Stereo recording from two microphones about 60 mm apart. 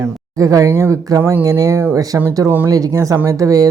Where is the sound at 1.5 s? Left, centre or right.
Right.